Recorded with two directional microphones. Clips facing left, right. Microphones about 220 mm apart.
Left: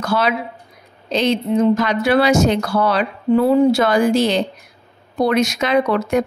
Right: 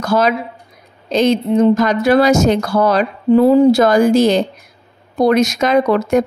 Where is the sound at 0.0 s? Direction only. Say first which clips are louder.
Right 4 dB; 40° right (ahead or behind).